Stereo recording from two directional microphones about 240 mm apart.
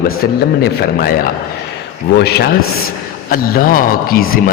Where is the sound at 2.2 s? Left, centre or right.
Left.